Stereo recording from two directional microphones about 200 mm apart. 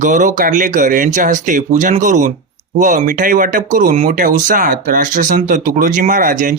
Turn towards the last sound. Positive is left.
turn(degrees=-40)  # may be behind; listen again after turning